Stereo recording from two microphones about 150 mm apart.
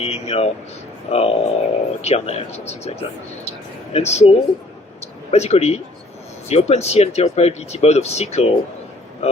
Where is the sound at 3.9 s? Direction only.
45° left (ahead or behind).